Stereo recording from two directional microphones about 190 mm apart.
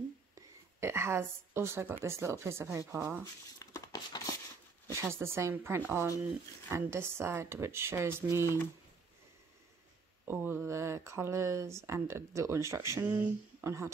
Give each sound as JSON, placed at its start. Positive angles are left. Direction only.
{"t": 0.7, "sound": "a woman's voice", "side_deg": -15}
{"t": 3.5, "sound": "a sound", "side_deg": 20}
{"t": 4.9, "sound": "speech", "side_deg": -15}
{"t": 10.2, "sound": "speech", "side_deg": -10}